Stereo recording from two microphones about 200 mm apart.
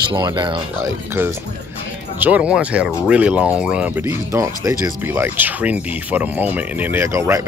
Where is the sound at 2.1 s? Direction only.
10° right (ahead or behind).